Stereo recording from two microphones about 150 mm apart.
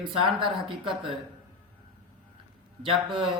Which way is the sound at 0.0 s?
35° right (ahead or behind).